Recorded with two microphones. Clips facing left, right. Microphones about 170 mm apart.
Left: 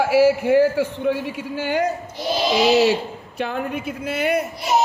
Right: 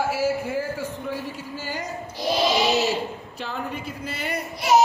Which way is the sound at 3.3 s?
60° left (ahead or behind).